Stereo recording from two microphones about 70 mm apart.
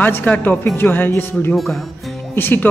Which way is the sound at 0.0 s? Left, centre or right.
Left.